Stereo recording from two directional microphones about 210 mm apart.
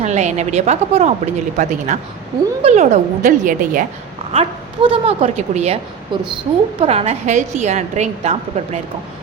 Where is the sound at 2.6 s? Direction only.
30° right (ahead or behind).